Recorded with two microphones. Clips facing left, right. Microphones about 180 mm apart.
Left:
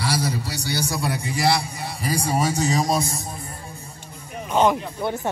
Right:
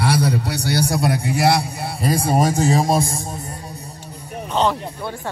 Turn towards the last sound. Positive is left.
turn(degrees=15)  # may be behind; listen again after turning